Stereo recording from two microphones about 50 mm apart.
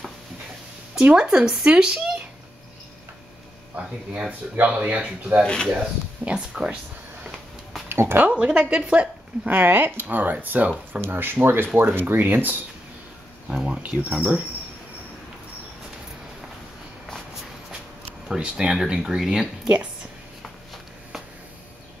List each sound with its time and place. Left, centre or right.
1.1 s speech: centre
4.3 s a woman's voice: right
5.4 s speech: centre
5.7 s a woman's voice: right
7.9 s a sound: right
8.3 s a woman's voice: right
9.5 s speech: right
11.0 s speech: right
13.7 s a woman's voice: right
18.4 s speech: centre